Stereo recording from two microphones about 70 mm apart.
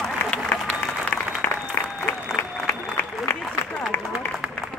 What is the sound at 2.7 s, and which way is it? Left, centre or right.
Applause, left.